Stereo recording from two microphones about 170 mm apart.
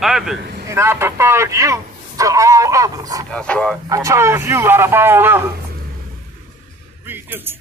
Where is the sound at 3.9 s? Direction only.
20° right (ahead or behind).